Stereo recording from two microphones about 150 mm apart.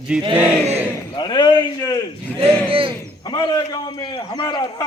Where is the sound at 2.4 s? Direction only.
35° right (ahead or behind).